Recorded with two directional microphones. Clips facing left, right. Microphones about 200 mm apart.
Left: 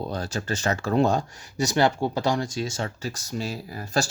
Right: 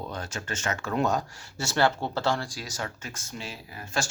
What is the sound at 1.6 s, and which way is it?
Speech, 15° left (ahead or behind).